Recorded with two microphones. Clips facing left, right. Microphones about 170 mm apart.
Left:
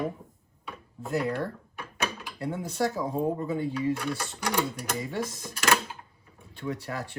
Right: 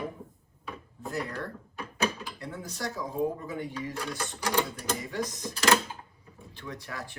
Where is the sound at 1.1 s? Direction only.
30° left (ahead or behind).